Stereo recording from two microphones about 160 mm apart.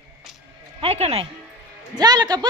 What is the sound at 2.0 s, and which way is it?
Speech, 25° right (ahead or behind).